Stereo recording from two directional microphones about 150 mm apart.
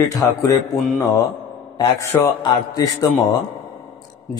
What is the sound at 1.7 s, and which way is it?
A man's voice, 25° left (ahead or behind).